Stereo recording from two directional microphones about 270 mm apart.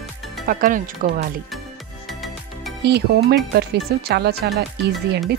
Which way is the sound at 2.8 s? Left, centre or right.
Right.